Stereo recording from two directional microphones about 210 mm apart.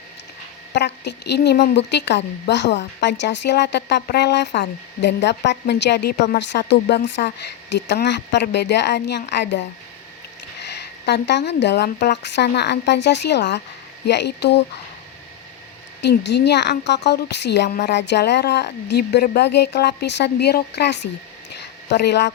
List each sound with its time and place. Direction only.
0.7 s a woman's voice: 55° left (ahead or behind)
16.0 s a woman's voice: 55° left (ahead or behind)
21.6 s a sound: 55° left (ahead or behind)